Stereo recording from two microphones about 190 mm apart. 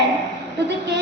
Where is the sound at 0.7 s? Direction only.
65° right (ahead or behind).